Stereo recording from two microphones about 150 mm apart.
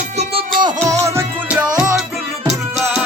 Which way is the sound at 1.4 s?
10° right (ahead or behind).